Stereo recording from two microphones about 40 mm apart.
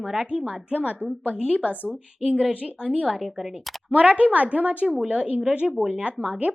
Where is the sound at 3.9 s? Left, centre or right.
Right.